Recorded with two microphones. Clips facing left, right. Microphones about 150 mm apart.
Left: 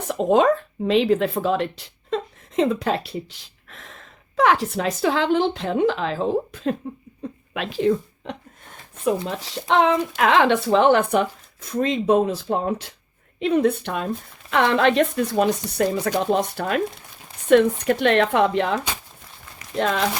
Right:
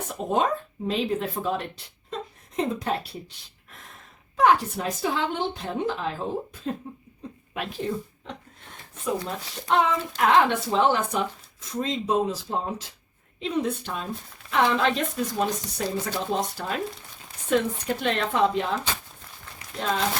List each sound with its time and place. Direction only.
0.1 s a woman's voice: 90° left
10.2 s speech: 90° left